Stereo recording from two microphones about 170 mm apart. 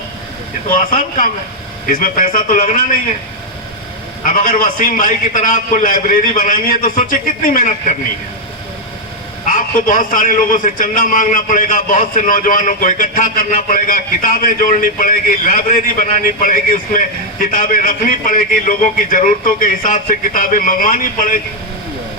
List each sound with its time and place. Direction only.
0.7 s a man's voice: 50° left (ahead or behind)
4.2 s a man's voice: 50° left (ahead or behind)
9.5 s a man's voice: 50° left (ahead or behind)